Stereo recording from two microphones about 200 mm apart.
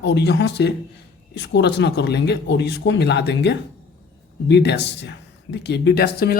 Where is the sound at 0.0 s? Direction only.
60° left (ahead or behind).